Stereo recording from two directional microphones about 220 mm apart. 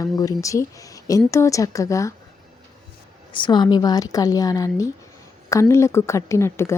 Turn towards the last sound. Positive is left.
turn(degrees=10)  # may be behind; listen again after turning